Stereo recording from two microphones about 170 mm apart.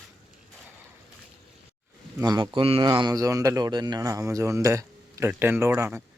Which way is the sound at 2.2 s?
25° right (ahead or behind).